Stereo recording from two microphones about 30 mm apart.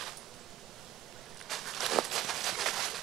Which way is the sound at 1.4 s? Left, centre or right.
Centre.